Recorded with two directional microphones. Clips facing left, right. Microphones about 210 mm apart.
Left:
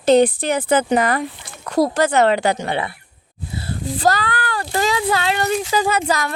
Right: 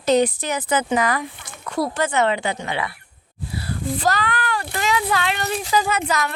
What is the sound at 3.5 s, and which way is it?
Speech, 30° left (ahead or behind).